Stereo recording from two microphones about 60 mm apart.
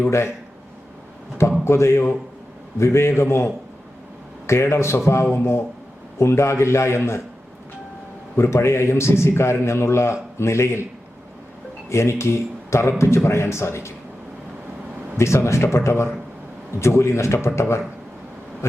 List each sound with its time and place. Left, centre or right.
1.6 s a man's voice: left
8.4 s a man's voice: left
11.9 s a man's voice: left
15.2 s a man's voice: left